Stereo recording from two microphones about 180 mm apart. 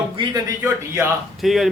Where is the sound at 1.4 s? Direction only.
Centre (ahead or behind).